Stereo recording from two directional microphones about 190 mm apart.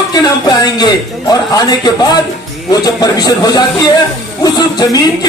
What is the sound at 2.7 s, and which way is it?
Speech, 20° left (ahead or behind).